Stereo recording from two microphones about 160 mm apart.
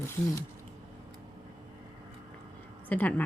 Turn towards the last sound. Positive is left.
turn(degrees=10)  # may be behind; listen again after turning